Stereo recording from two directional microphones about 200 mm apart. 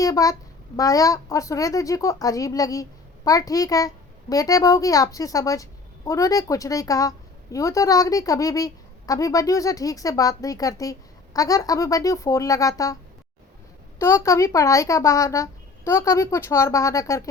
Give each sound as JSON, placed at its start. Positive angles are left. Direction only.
{"t": 0.0, "sound": "a woman's voice", "side_deg": 15}
{"t": 14.0, "sound": "a woman's voice", "side_deg": 15}